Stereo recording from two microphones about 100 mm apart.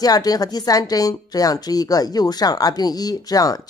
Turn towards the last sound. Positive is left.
turn(degrees=40)  # may be behind; listen again after turning